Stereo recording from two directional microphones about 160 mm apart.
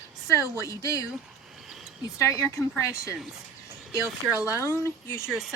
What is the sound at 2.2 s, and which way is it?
Speech, 20° left (ahead or behind).